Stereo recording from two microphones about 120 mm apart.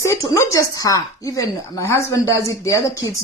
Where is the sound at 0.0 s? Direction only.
25° left (ahead or behind).